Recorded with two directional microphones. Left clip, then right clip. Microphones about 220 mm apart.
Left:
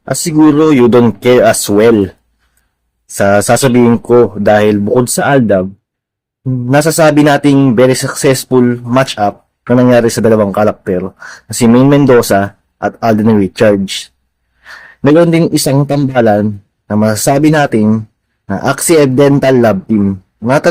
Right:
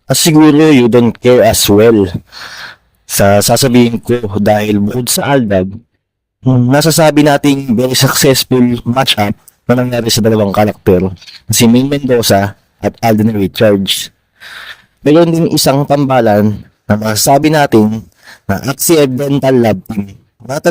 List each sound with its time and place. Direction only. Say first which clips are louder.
0.1 s a man's voice: right 2 dB; 40° right (ahead or behind)
3.2 s a man's voice: even; 40° right (ahead or behind)
6.7 s a man's voice: left 1 dB; 40° right (ahead or behind)
15.0 s a man's voice: left 1 dB; 40° right (ahead or behind)